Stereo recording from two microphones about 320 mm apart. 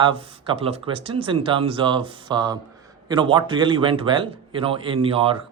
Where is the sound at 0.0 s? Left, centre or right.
Centre.